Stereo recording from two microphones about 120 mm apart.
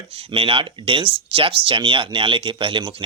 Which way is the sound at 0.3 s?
50° right (ahead or behind).